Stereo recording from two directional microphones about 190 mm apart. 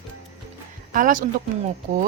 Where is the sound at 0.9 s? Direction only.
45° right (ahead or behind).